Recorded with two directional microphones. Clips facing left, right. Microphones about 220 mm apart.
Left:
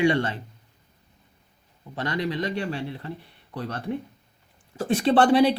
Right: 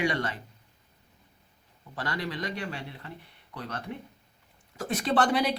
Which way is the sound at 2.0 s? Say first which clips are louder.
Left 6 dB; 20° left (ahead or behind).